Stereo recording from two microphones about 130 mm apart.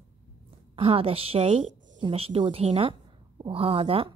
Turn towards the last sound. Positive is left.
turn(degrees=-45)  # may be behind; listen again after turning